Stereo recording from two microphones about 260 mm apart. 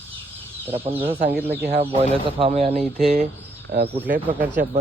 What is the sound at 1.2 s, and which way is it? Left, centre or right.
Speech, right.